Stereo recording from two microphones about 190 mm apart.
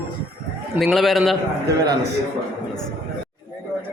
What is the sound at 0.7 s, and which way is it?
Speech, centre (ahead or behind).